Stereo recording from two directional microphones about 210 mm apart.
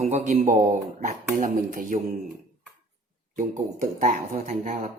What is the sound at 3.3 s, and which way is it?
A man's voice, 35° right (ahead or behind).